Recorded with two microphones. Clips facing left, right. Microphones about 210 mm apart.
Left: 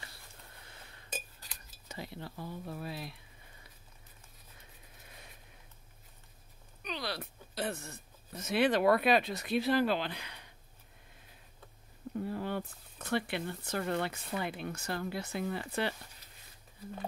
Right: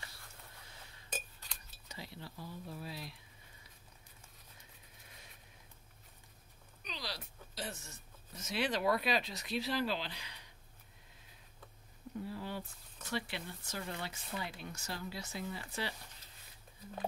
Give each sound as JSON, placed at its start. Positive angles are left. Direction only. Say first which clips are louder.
{"t": 1.9, "sound": "speech", "louder": "left 5 dB", "side_deg": 55}
{"t": 6.8, "sound": "speech", "louder": "left 7 dB", "side_deg": 60}
{"t": 12.2, "sound": "speech", "louder": "left 6 dB", "side_deg": 55}